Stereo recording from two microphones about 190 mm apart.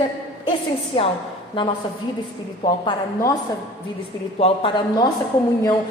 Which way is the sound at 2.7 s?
25° left (ahead or behind).